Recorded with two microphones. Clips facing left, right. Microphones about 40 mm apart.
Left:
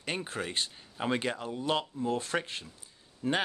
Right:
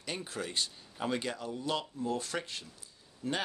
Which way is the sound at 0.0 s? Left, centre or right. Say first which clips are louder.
Left 4 dB; left.